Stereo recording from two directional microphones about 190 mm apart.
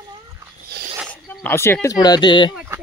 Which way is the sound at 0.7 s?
60° right (ahead or behind).